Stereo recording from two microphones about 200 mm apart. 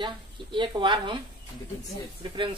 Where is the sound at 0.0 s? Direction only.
25° right (ahead or behind).